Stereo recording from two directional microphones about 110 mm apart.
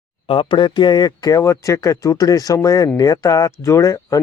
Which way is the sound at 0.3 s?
50° left (ahead or behind).